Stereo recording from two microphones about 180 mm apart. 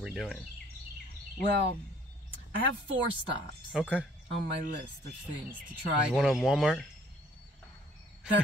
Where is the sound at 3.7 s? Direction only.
5° right (ahead or behind).